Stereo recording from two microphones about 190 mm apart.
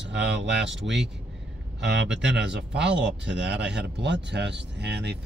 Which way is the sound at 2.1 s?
70° right (ahead or behind).